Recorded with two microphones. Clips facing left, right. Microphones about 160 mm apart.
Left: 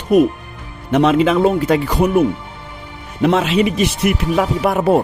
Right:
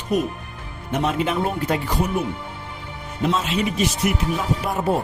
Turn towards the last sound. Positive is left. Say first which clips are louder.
# left 7 dB
turn(degrees=75)  # may be behind; listen again after turning